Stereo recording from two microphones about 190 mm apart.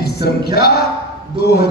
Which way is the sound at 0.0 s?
55° left (ahead or behind).